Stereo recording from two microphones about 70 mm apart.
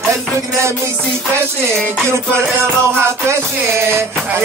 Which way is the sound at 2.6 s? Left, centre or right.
Right.